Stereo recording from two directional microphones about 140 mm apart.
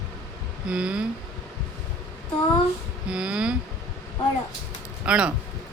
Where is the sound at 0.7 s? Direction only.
5° right (ahead or behind).